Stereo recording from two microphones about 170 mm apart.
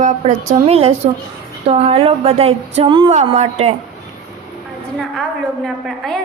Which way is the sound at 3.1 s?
40° right (ahead or behind).